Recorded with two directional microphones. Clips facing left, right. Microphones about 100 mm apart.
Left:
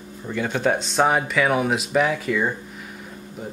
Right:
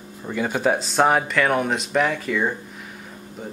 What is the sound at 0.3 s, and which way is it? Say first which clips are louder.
Speech: right 1 dB; 5° right (ahead or behind).